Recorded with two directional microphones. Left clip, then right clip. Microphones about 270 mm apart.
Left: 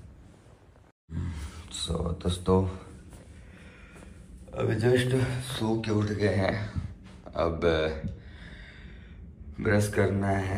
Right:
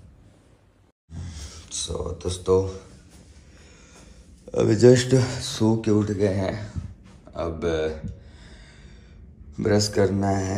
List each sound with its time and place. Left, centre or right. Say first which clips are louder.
1.9 s speech: right 2 dB; centre
4.6 s speech: right 9 dB; right
5.9 s speech: right 5 dB; centre
7.3 s a sound: even; centre
9.6 s speech: right 5 dB; right